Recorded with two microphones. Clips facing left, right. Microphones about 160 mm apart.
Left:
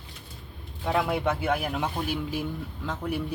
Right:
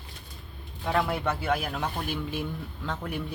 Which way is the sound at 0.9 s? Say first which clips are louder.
Left 2 dB; 15° left (ahead or behind).